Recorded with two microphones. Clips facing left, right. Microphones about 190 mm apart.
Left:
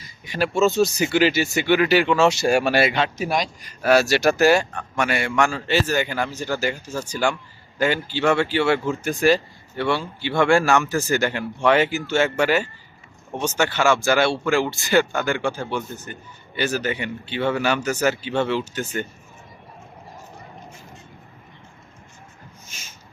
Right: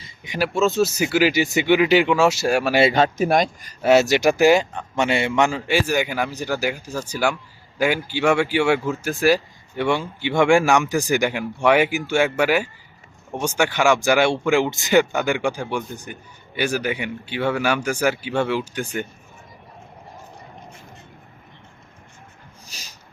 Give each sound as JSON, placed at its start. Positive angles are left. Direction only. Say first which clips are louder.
{"t": 0.3, "sound": "speech", "louder": "left 1 dB", "side_deg": 0}
{"t": 2.9, "sound": "speech", "louder": "right 5 dB", "side_deg": -45}
{"t": 3.8, "sound": "speech", "louder": "right 2 dB", "side_deg": -20}
{"t": 22.6, "sound": "a sound", "louder": "right 1 dB", "side_deg": -35}